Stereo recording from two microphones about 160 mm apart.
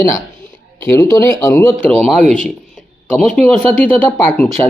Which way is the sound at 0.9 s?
20° left (ahead or behind).